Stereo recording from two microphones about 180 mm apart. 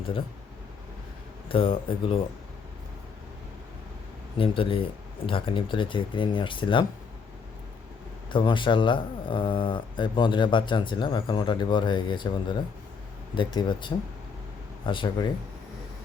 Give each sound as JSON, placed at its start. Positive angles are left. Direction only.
{"t": 1.5, "sound": "speech", "side_deg": 30}
{"t": 4.4, "sound": "speech", "side_deg": 30}
{"t": 8.3, "sound": "speech", "side_deg": 25}